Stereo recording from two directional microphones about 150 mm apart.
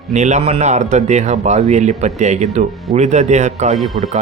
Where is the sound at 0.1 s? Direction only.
50° right (ahead or behind).